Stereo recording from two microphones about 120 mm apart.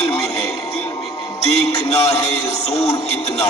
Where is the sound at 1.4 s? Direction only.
60° left (ahead or behind).